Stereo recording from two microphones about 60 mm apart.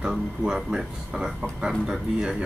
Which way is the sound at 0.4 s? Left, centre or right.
Centre.